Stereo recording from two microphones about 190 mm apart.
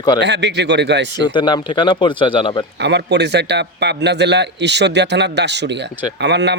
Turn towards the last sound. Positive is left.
turn(degrees=-65)  # may be behind; listen again after turning